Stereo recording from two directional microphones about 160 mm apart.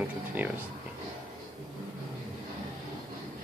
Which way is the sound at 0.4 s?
10° right (ahead or behind).